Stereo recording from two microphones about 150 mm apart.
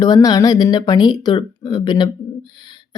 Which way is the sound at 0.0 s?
25° left (ahead or behind).